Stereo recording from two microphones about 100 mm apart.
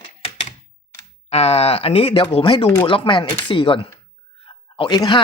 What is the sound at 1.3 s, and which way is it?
Speech, 90° left.